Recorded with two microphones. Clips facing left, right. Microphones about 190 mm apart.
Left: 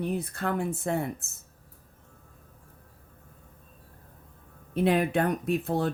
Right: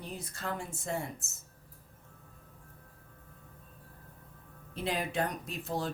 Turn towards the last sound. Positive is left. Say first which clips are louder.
# left 9 dB
turn(degrees=60)  # may be behind; listen again after turning